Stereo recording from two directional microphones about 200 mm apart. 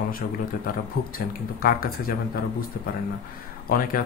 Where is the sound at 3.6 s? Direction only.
45° left (ahead or behind).